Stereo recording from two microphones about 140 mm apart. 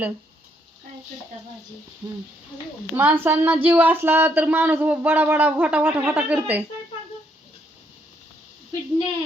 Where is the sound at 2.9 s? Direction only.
15° right (ahead or behind).